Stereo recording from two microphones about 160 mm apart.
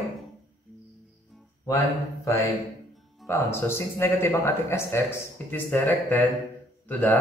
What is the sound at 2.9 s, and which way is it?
Music, centre (ahead or behind).